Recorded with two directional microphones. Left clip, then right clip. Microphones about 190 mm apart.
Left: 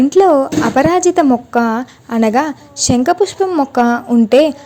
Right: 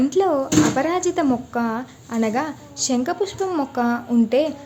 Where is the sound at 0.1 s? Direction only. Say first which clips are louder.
Left 9 dB; 40° left (ahead or behind).